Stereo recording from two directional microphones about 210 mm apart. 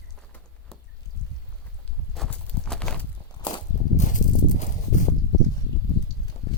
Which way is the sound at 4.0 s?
35° left (ahead or behind).